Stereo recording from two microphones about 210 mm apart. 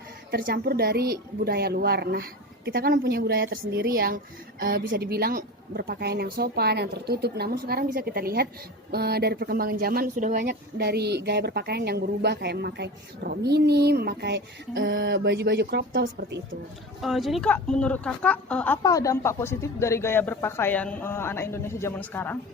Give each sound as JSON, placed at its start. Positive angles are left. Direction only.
{"t": 0.3, "sound": "speech", "side_deg": -45}
{"t": 17.0, "sound": "speech", "side_deg": 0}